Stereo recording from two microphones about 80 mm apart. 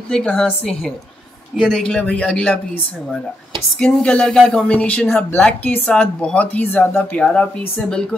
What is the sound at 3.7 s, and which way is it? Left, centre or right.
A woman's voice, centre.